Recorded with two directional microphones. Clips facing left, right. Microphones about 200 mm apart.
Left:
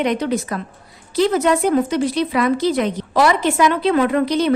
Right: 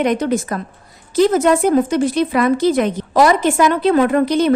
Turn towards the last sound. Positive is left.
turn(degrees=-50)  # may be behind; listen again after turning